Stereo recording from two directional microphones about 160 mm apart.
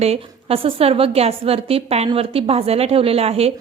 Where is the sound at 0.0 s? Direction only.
40° right (ahead or behind).